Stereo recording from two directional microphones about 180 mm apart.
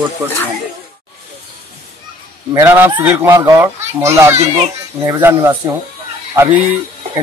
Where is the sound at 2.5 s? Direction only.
15° right (ahead or behind).